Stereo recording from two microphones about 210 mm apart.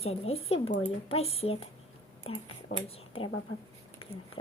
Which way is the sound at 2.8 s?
25° left (ahead or behind).